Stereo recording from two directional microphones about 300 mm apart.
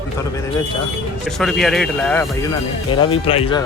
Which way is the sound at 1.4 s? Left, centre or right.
Centre.